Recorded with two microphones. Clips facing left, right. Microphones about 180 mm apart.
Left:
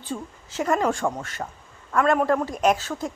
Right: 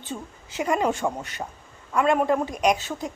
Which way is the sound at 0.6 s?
15° right (ahead or behind).